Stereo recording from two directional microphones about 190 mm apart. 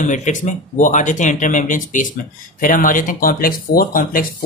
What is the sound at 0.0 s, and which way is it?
Speech, 40° left (ahead or behind).